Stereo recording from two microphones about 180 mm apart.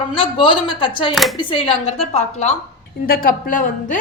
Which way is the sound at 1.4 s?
30° left (ahead or behind).